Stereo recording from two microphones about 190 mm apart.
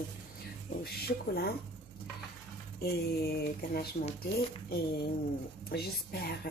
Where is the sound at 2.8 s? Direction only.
55° left (ahead or behind).